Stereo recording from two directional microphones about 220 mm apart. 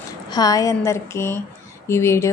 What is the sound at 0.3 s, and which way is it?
A woman's voice, 15° left (ahead or behind).